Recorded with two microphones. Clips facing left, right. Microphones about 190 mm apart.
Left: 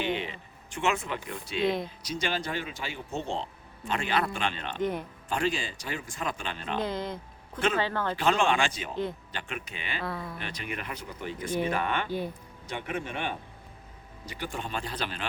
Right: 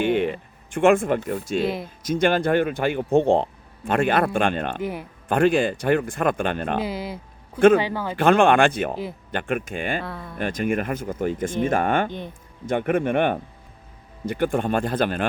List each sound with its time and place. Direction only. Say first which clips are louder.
0.0 s speech: right 10 dB; 50° right (ahead or behind)
1.6 s speech: right 2 dB; 5° right (ahead or behind)
2.0 s speech: right 15 dB; 55° right (ahead or behind)
4.8 s speech: right 1 dB; 10° right (ahead or behind)
5.3 s speech: right 11 dB; 55° right (ahead or behind)
6.8 s speech: right 3 dB; 10° right (ahead or behind)
8.1 s speech: right 10 dB; 55° right (ahead or behind)
10.0 s speech: right 1 dB; centre (ahead or behind)
10.3 s speech: right 13 dB; 50° right (ahead or behind)